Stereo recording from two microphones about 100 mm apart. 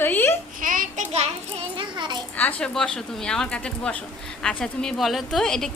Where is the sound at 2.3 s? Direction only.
15° left (ahead or behind).